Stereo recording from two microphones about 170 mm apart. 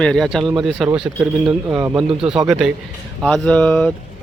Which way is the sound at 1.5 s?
15° right (ahead or behind).